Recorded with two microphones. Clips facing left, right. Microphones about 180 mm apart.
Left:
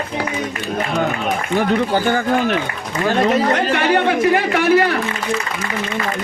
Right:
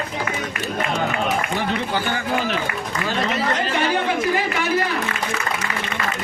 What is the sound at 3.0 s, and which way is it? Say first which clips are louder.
Speech: left 8 dB; 60° left (ahead or behind).